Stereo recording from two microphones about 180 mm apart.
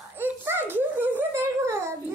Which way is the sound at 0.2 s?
10° right (ahead or behind).